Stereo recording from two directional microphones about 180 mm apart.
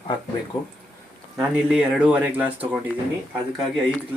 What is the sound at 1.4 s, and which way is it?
Speech, 5° right (ahead or behind).